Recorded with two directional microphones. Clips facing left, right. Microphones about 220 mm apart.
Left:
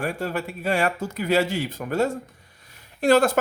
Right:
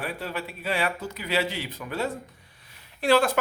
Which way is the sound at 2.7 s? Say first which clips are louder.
Left 3 dB; 45° left (ahead or behind).